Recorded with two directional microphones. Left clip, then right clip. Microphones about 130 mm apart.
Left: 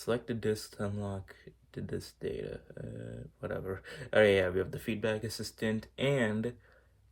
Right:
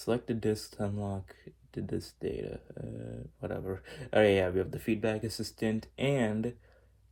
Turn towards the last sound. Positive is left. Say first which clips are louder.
# even
turn(degrees=0)  # may be behind; listen again after turning